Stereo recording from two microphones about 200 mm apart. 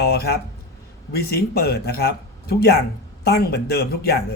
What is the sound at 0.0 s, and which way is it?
Speech, 50° left (ahead or behind).